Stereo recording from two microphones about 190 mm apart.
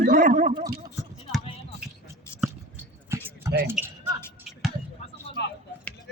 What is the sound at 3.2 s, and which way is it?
Basketball bounce, 10° right (ahead or behind).